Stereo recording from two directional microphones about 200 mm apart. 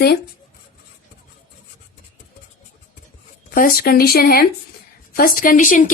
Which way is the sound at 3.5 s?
45° left (ahead or behind).